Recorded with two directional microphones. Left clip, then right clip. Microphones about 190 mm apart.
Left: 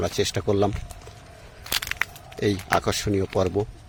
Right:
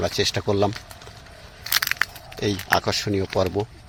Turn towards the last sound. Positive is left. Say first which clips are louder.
# right 1 dB
turn(degrees=10)  # may be behind; listen again after turning